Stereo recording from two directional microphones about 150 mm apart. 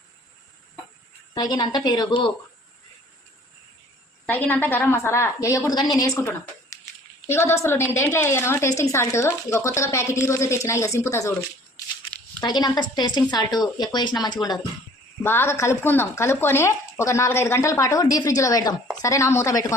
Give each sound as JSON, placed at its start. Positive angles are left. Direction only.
{"t": 1.3, "sound": "speech", "side_deg": 30}
{"t": 4.3, "sound": "a woman's voice", "side_deg": 10}
{"t": 12.4, "sound": "speech", "side_deg": 30}
{"t": 15.2, "sound": "a woman's voice", "side_deg": 15}